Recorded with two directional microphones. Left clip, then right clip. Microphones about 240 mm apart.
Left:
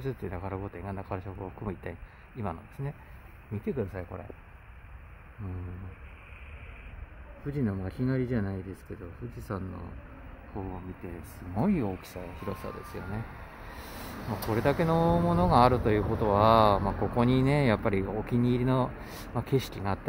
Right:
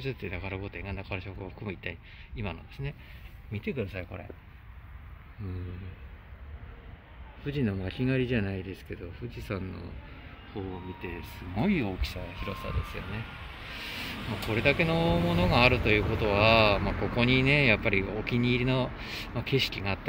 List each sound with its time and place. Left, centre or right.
0.0 s speech: centre
7.4 s speech: centre
11.5 s speech: centre
13.7 s speech: centre